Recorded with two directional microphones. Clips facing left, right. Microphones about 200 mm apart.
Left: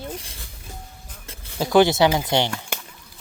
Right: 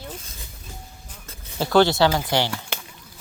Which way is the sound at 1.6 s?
15° left (ahead or behind).